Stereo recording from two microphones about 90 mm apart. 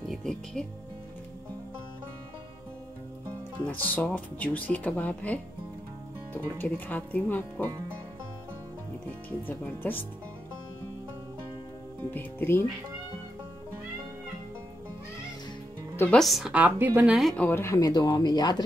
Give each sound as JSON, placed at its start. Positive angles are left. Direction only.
{"t": 0.1, "sound": "music", "side_deg": 5}
{"t": 3.6, "sound": "speech", "side_deg": 15}
{"t": 9.5, "sound": "speech", "side_deg": 20}
{"t": 12.1, "sound": "speech", "side_deg": 20}
{"t": 16.1, "sound": "speech", "side_deg": 0}
{"t": 16.5, "sound": "a woman's voice", "side_deg": -20}
{"t": 17.0, "sound": "speech", "side_deg": -5}
{"t": 17.5, "sound": "speech", "side_deg": 25}
{"t": 17.7, "sound": "speech", "side_deg": 45}